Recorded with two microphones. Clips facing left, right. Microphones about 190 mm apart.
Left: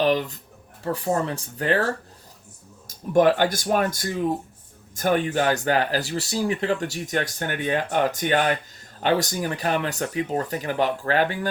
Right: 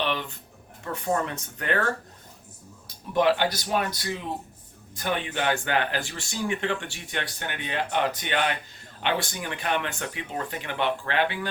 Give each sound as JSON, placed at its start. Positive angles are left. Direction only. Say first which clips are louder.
{"t": 0.0, "sound": "speech", "louder": "left 8 dB", "side_deg": 40}
{"t": 2.8, "sound": "speech", "louder": "left 5 dB", "side_deg": 45}